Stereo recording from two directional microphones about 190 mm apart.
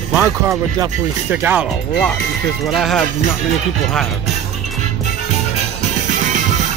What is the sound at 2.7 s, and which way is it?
Music, centre (ahead or behind).